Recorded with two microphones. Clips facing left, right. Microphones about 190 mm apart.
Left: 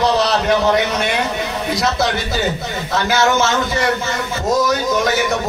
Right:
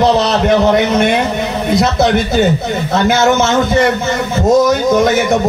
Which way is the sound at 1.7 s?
25° right (ahead or behind).